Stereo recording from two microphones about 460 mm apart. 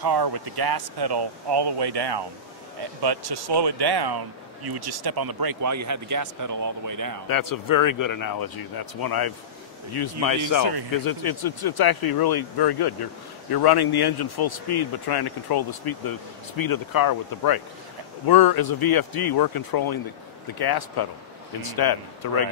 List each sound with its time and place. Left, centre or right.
0.0 s speech: right
7.2 s speech: left
10.6 s speech: right
11.1 s speech: left